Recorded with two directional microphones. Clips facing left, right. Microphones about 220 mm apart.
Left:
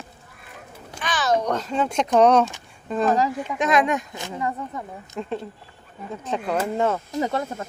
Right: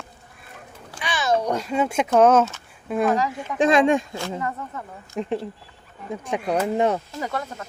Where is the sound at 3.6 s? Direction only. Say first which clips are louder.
Right 4 dB; 30° right (ahead or behind).